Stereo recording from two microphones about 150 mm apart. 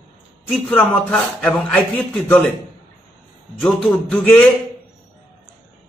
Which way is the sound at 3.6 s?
10° left (ahead or behind).